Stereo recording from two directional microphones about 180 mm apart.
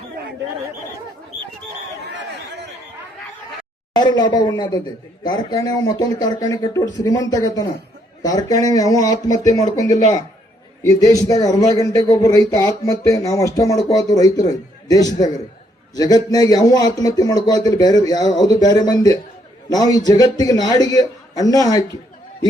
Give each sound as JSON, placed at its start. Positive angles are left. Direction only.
{"t": 3.9, "sound": "speech", "side_deg": 25}
{"t": 10.8, "sound": "speech", "side_deg": 20}